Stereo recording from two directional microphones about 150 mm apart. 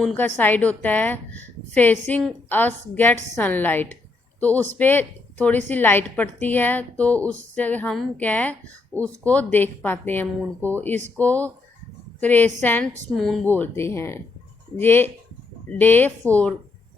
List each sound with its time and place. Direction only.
0.3 s a woman's voice: 10° left (ahead or behind)
13.1 s a woman's voice: centre (ahead or behind)